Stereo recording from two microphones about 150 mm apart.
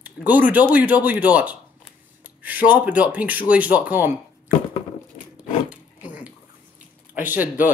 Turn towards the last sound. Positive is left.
turn(degrees=-10)  # may be behind; listen again after turning